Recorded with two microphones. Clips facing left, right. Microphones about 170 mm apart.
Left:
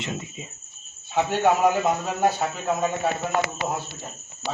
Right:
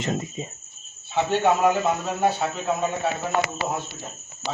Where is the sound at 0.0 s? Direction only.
40° right (ahead or behind).